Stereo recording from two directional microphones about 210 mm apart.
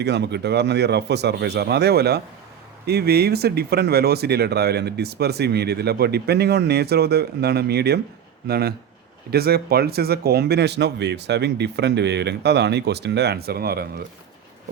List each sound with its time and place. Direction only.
0.0 s speech: 55° right (ahead or behind)